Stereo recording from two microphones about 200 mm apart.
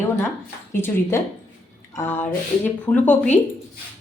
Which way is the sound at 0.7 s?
10° left (ahead or behind).